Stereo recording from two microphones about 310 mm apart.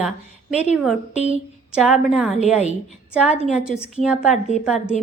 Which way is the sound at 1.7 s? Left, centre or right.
Centre.